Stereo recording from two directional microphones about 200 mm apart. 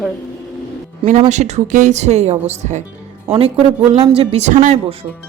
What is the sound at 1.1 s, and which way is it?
Speech, 35° right (ahead or behind).